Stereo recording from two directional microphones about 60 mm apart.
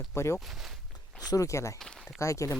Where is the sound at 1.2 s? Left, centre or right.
Left.